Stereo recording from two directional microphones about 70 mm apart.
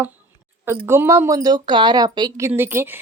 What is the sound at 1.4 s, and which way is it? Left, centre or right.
Speech, right.